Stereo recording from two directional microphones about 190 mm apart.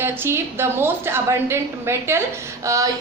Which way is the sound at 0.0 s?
10° right (ahead or behind).